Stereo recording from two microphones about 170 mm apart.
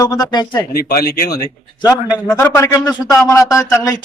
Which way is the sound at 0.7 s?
65° left (ahead or behind).